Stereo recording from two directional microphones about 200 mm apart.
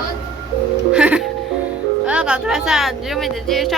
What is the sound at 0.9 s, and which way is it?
Speech, 5° right (ahead or behind).